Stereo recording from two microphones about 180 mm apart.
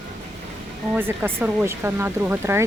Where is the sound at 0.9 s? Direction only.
10° right (ahead or behind).